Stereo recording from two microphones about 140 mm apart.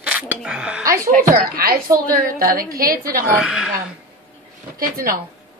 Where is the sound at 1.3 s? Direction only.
90° right.